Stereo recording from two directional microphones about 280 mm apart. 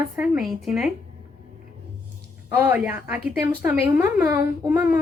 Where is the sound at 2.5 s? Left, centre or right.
Centre.